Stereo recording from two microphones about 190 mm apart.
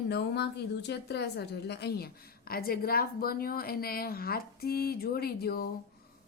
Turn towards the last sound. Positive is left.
turn(degrees=55)  # may be behind; listen again after turning